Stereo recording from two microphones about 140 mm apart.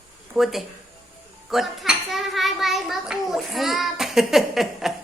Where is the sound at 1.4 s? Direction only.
Centre (ahead or behind).